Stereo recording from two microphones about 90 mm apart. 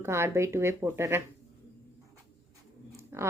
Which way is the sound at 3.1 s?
30° right (ahead or behind).